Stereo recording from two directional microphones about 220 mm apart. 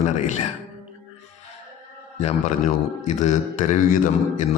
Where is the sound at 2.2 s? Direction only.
35° left (ahead or behind).